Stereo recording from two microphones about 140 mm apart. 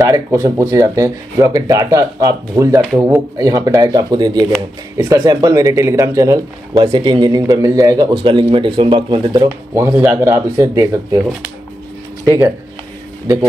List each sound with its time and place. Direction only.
0.0 s speech: 20° right (ahead or behind)
9.8 s speech: 15° right (ahead or behind)